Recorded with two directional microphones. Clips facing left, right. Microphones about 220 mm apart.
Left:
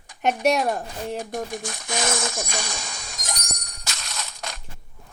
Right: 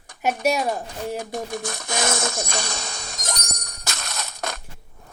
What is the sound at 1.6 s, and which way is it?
Speech, 65° right (ahead or behind).